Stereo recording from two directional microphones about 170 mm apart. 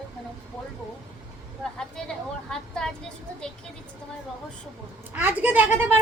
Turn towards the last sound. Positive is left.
turn(degrees=-10)  # may be behind; listen again after turning